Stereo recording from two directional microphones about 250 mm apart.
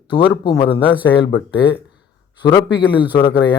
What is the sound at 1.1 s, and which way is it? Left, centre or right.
Speech, left.